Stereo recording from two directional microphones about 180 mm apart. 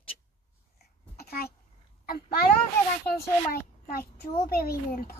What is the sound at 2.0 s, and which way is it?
Speech, 55° left (ahead or behind).